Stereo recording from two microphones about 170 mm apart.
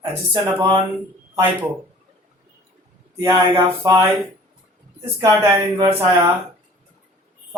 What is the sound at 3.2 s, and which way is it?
Speech, 15° right (ahead or behind).